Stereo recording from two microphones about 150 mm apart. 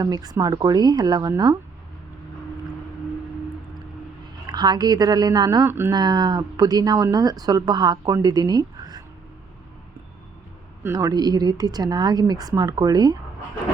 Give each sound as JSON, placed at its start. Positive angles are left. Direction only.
{"t": 0.0, "sound": "speech", "side_deg": -25}
{"t": 4.4, "sound": "speech", "side_deg": -30}
{"t": 5.9, "sound": "speech", "side_deg": -30}
{"t": 10.8, "sound": "speech", "side_deg": -20}